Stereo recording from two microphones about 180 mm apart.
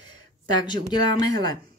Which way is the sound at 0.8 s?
20° left (ahead or behind).